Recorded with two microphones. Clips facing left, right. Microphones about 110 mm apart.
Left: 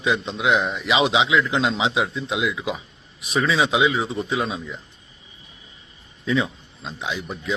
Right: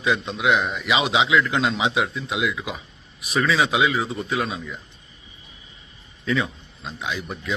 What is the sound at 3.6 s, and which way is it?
Speech, 20° left (ahead or behind).